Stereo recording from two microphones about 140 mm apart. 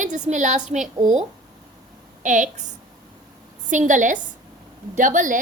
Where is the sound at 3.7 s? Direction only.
65° right (ahead or behind).